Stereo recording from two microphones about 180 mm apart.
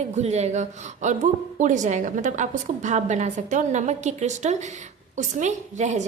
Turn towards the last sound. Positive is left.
turn(degrees=-40)  # may be behind; listen again after turning